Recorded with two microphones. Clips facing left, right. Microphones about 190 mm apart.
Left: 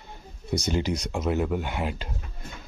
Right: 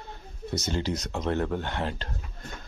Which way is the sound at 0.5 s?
15° left (ahead or behind).